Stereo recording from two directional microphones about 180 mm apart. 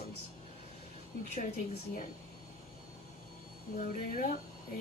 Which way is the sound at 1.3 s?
45° left (ahead or behind).